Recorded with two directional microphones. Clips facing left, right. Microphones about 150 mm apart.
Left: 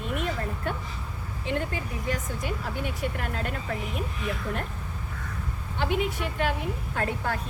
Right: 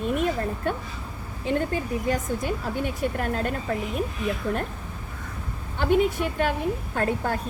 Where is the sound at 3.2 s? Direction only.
40° right (ahead or behind).